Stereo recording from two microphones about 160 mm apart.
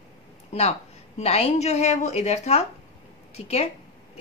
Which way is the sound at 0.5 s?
40° left (ahead or behind).